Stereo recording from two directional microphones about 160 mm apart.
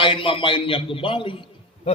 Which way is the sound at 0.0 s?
30° left (ahead or behind).